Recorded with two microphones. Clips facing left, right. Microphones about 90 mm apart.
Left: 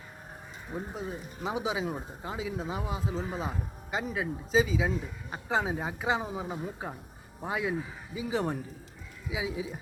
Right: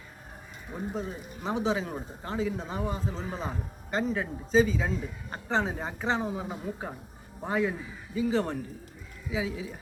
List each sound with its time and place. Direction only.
0.9 s a man's voice: 10° left (ahead or behind)